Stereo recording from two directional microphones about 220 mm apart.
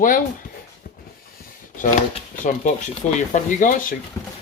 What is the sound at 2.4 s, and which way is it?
Speech, 35° left (ahead or behind).